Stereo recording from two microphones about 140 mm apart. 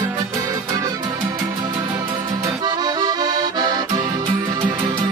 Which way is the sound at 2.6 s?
30° right (ahead or behind).